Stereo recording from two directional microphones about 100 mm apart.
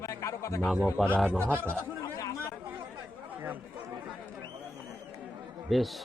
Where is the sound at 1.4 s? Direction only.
20° right (ahead or behind).